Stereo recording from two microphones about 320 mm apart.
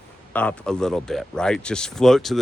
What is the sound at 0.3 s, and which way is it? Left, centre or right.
Speech, centre.